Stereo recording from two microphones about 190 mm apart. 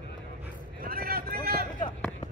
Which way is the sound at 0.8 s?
50° right (ahead or behind).